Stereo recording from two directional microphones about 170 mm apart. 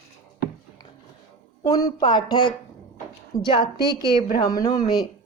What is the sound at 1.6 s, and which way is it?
Speech, 20° left (ahead or behind).